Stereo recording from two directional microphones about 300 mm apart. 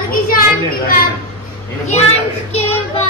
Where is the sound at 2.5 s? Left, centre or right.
Left.